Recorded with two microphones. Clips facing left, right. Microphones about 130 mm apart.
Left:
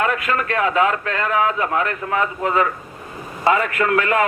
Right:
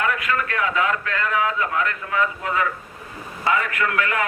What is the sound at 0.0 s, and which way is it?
A man's voice, 30° left (ahead or behind).